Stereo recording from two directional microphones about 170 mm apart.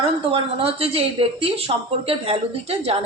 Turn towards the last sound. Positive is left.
turn(degrees=-35)  # may be behind; listen again after turning